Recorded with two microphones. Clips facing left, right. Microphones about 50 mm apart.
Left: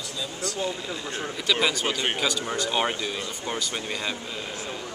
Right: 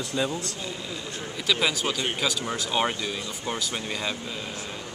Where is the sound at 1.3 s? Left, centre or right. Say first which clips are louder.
Even; centre.